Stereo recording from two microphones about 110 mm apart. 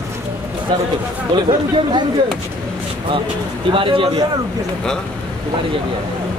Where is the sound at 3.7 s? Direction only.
50° right (ahead or behind).